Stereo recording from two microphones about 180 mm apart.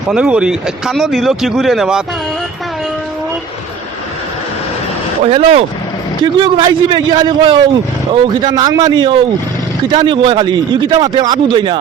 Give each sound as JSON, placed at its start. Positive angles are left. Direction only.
{"t": 0.1, "sound": "speech", "side_deg": -5}
{"t": 5.2, "sound": "a man's voice", "side_deg": -35}